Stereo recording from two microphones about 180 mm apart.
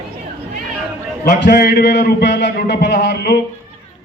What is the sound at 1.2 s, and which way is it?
A man's voice, 60° left (ahead or behind).